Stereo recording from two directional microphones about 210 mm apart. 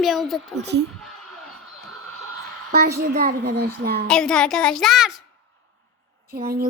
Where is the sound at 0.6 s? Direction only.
55° right (ahead or behind).